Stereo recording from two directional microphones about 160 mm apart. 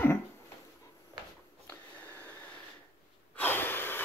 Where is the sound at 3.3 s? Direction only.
15° left (ahead or behind).